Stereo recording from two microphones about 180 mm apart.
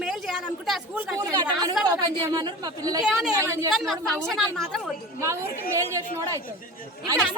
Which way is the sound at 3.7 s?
Centre (ahead or behind).